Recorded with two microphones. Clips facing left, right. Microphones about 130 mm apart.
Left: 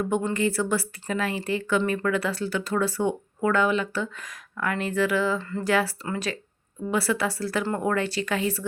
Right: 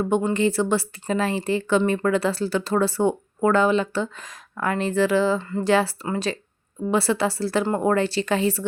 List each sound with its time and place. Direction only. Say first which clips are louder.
0.0 s speech: right 4 dB; 20° right (ahead or behind)